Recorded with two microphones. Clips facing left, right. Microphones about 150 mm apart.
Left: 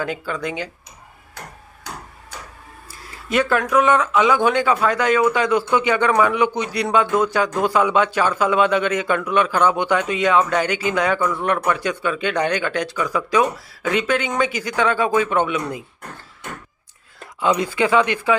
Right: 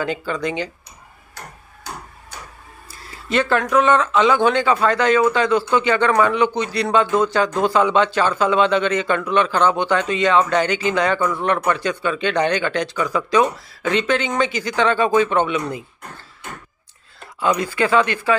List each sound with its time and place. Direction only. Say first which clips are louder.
0.0 s speech: right 2 dB; 5° left (ahead or behind)
2.9 s speech: even; 10° left (ahead or behind)
17.4 s speech: even; 20° left (ahead or behind)